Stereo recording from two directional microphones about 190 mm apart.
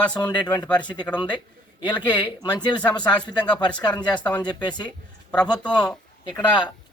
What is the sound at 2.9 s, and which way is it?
A man's voice, 20° left (ahead or behind).